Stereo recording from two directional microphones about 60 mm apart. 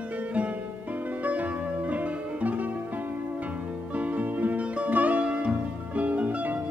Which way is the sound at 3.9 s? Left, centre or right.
Right.